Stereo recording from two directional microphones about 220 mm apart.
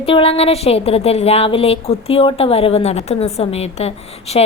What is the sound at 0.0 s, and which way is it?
A woman's voice, 25° left (ahead or behind).